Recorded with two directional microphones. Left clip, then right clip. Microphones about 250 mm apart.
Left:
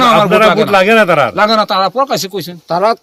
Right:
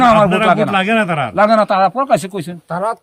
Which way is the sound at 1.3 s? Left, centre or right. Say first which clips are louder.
Left 1 dB; centre.